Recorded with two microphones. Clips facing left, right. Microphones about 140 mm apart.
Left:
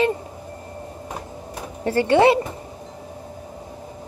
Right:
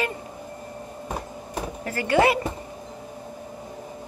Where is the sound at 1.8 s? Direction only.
30° left (ahead or behind).